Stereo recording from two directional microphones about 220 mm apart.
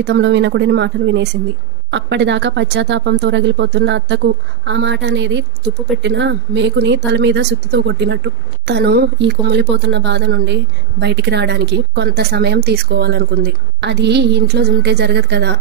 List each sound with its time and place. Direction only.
0.0 s speech: 55° right (ahead or behind)